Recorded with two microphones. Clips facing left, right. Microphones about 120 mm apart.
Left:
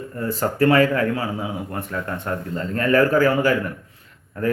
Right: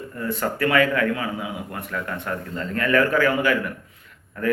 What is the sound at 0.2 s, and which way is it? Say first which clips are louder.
A man's voice: left 4 dB; 35° left (ahead or behind).